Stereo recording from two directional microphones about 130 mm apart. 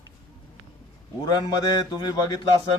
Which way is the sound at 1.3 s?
30° left (ahead or behind).